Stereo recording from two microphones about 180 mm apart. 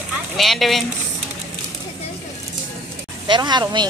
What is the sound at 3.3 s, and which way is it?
Speech, 25° right (ahead or behind).